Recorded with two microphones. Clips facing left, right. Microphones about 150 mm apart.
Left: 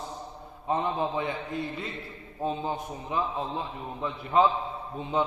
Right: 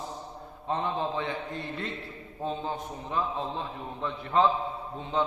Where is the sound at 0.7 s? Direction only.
10° left (ahead or behind).